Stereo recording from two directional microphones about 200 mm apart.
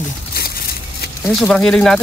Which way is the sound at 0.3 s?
50° left (ahead or behind).